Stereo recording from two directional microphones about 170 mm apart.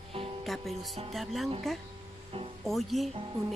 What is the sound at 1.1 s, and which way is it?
Speech, centre (ahead or behind).